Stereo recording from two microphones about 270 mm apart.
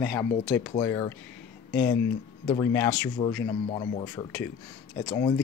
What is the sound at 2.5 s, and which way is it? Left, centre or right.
Speech, centre.